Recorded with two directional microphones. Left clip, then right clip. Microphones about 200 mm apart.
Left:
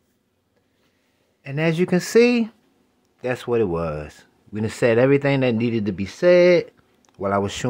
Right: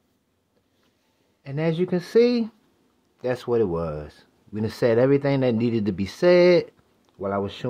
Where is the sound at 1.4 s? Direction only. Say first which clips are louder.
Left 3 dB; 15° left (ahead or behind).